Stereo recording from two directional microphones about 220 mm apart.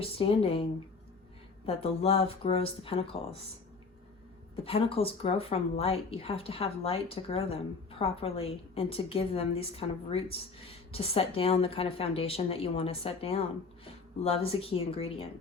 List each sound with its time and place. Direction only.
0.0 s speech: 25° left (ahead or behind)
1.6 s speech: 25° left (ahead or behind)
4.5 s speech: 25° left (ahead or behind)